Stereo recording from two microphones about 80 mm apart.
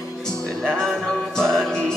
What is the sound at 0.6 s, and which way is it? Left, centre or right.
Music, centre.